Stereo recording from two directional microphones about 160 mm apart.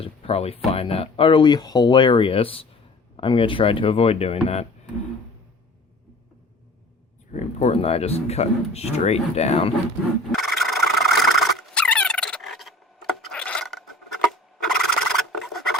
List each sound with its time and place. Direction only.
0.0 s speech: 40° left (ahead or behind)
7.3 s speech: 40° left (ahead or behind)
10.3 s squeal: centre (ahead or behind)
14.3 s filing: 5° left (ahead or behind)